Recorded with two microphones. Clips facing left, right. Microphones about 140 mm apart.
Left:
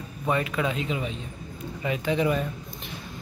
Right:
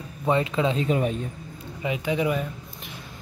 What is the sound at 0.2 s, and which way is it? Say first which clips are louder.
Speech: right 3 dB; 25° right (ahead or behind).